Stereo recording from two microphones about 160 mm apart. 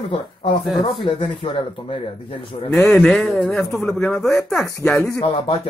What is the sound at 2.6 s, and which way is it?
Speech, 15° left (ahead or behind).